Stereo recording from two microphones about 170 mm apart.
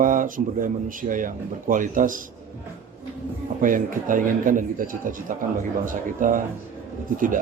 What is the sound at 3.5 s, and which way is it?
Speech, 50° right (ahead or behind).